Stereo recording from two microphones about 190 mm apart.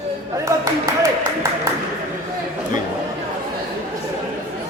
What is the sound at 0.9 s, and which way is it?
Speech, 15° right (ahead or behind).